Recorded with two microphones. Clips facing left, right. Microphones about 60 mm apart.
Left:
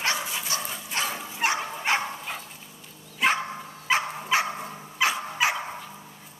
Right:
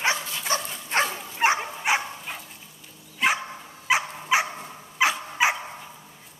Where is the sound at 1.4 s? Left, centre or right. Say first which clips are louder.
Right 4 dB; right.